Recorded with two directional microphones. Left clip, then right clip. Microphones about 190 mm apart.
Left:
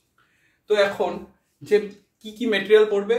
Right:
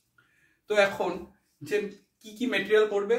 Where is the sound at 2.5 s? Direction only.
30° left (ahead or behind).